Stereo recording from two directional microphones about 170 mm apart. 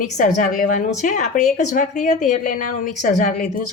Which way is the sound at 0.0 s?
50° left (ahead or behind).